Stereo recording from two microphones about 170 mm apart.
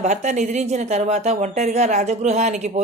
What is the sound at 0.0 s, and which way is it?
A woman's voice, 45° right (ahead or behind).